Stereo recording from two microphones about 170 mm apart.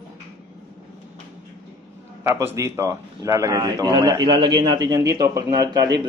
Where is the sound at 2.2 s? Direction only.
15° right (ahead or behind).